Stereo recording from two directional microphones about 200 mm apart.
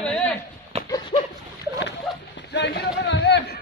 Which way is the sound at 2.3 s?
60° left (ahead or behind).